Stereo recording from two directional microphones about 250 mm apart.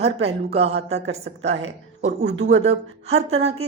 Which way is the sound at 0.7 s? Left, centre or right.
Right.